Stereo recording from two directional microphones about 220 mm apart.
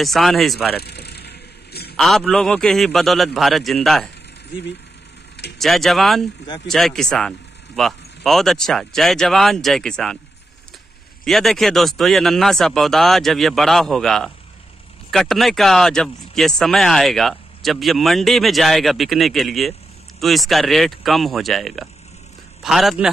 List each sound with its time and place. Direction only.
0.0 s speech: centre (ahead or behind)
0.8 s vehicle: 45° left (ahead or behind)
2.0 s speech: centre (ahead or behind)
5.6 s speech: centre (ahead or behind)
11.2 s speech: centre (ahead or behind)